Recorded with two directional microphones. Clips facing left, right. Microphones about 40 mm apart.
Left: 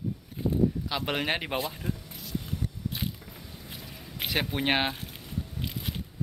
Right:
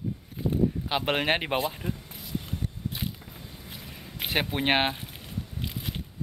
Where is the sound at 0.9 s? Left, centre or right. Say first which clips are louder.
Right 4 dB; right.